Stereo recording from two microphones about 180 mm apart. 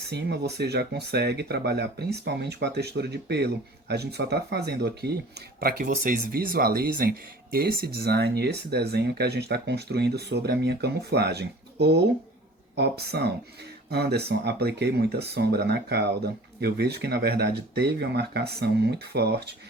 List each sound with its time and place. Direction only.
0.1 s speech: 70° right (ahead or behind)
5.5 s speech: 55° right (ahead or behind)